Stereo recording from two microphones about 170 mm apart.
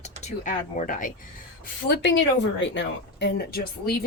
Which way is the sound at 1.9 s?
90° left.